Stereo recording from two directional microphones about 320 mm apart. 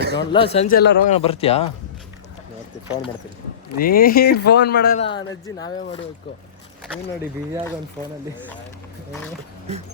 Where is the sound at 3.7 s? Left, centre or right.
Left.